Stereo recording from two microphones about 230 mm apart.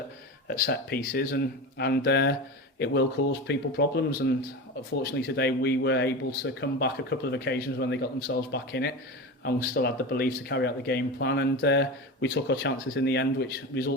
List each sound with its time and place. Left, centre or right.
0.4 s speech: left